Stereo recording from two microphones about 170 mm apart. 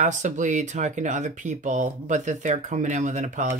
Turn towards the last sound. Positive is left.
turn(degrees=-45)  # may be behind; listen again after turning